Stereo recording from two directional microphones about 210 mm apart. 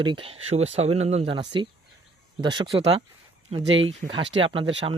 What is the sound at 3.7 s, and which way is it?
Speech, 65° right (ahead or behind).